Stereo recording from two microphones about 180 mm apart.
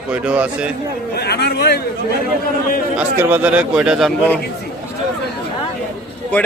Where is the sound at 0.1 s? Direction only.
5° right (ahead or behind).